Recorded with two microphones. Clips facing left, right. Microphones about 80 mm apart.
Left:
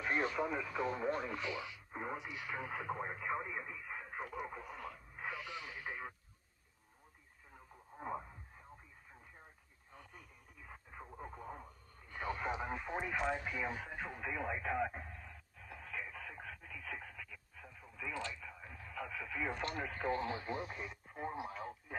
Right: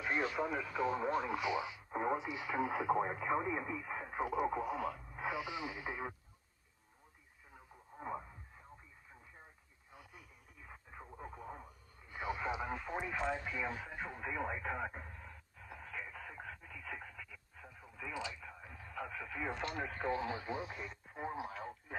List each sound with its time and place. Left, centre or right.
0.3 s speech: centre
3.0 s speech: right
4.2 s speech: centre
5.2 s speech: centre
8.0 s speech: centre
11.0 s radio: centre
12.1 s radio: centre
12.6 s radio: centre
13.2 s speech: centre
14.1 s radio: centre
19.1 s radio: centre
19.6 s speech: centre